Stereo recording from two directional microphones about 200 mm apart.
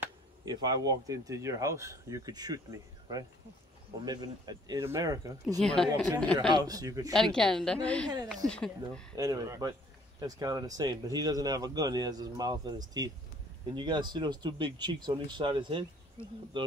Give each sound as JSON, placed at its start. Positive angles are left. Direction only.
{"t": 0.0, "sound": "speech", "side_deg": -20}
{"t": 5.6, "sound": "a woman's voice", "side_deg": 5}
{"t": 6.5, "sound": "speech", "side_deg": -20}
{"t": 7.2, "sound": "a woman's voice", "side_deg": 0}
{"t": 9.1, "sound": "speech", "side_deg": -15}